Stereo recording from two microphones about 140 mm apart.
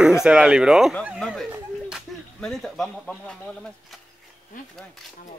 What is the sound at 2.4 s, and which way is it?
Speech, centre (ahead or behind).